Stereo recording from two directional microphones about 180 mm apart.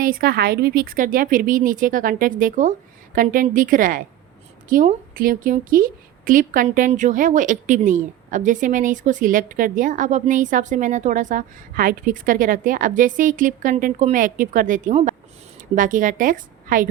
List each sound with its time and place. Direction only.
0.0 s a woman's voice: 55° right (ahead or behind)